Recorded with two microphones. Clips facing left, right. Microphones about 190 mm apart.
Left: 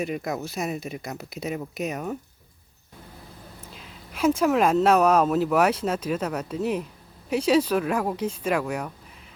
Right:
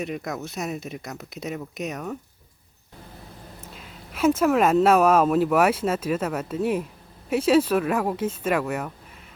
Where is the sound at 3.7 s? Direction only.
Centre (ahead or behind).